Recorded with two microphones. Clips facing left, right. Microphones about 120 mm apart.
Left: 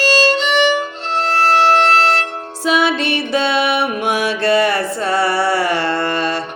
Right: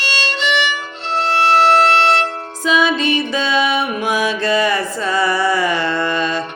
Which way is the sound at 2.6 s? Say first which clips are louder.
Even; 65° left (ahead or behind).